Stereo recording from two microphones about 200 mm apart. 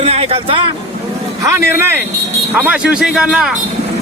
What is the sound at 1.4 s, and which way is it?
Speech, 15° right (ahead or behind).